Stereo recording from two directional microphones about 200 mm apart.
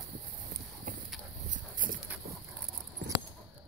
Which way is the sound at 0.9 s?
40° right (ahead or behind).